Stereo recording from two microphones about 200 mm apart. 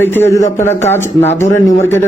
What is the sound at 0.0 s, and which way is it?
Speech, 10° left (ahead or behind).